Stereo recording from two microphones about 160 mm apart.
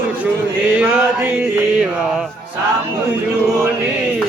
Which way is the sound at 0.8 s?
10° right (ahead or behind).